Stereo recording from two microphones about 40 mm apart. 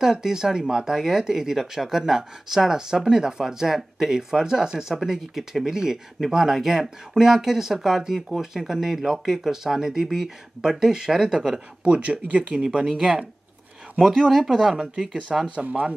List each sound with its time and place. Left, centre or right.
0.0 s speech: centre
11.8 s speech: right
12.8 s speech: centre
14.3 s speech: centre